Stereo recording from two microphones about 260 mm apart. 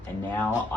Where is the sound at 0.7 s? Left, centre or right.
Centre.